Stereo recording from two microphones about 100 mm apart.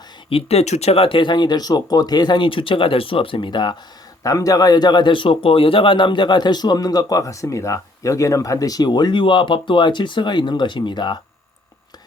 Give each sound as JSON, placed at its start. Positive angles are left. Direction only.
{"t": 0.3, "sound": "speech", "side_deg": 80}
{"t": 4.2, "sound": "speech", "side_deg": 35}